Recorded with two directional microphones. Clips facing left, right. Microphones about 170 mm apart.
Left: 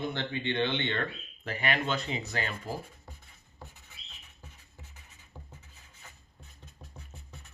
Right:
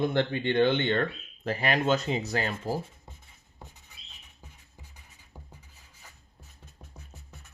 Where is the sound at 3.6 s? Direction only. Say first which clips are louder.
Even; 20° right (ahead or behind).